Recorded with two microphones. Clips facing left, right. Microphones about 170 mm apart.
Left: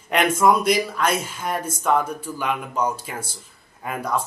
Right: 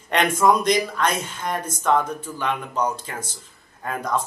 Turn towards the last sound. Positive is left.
turn(degrees=10)  # may be behind; listen again after turning